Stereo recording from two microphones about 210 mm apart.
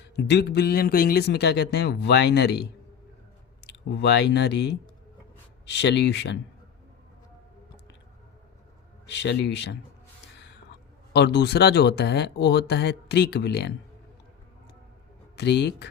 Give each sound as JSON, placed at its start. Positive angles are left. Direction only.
{"t": 0.0, "sound": "a man's voice", "side_deg": 55}
{"t": 3.7, "sound": "a man's voice", "side_deg": 55}
{"t": 9.0, "sound": "speech", "side_deg": 55}
{"t": 10.3, "sound": "gasp", "side_deg": 55}
{"t": 11.1, "sound": "a man's voice", "side_deg": 55}
{"t": 15.4, "sound": "a man's voice", "side_deg": 55}